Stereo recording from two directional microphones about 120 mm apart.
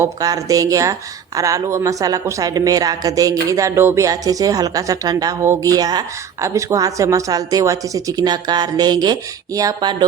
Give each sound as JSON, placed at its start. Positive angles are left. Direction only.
{"t": 0.0, "sound": "a woman's voice", "side_deg": -30}